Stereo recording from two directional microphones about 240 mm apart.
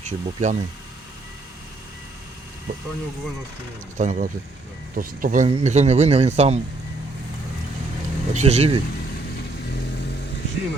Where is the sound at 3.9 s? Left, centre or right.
Right.